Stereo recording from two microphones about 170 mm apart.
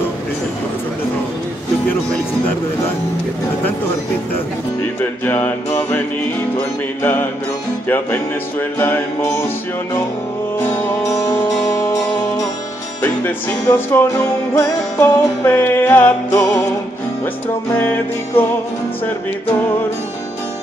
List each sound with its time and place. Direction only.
5.2 s music: 10° left (ahead or behind)
7.0 s music: 15° left (ahead or behind)
10.6 s music: 15° left (ahead or behind)
13.7 s music: 15° left (ahead or behind)
17.7 s music: 10° left (ahead or behind)